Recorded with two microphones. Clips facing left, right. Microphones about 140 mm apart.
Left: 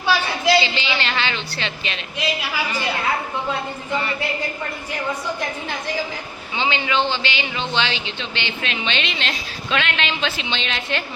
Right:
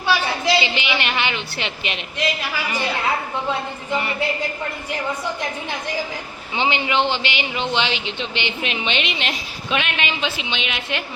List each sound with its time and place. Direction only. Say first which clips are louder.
0.6 s a woman's voice: right 1 dB; 20° right (ahead or behind)
6.6 s a man's voice: right 1 dB; 20° right (ahead or behind)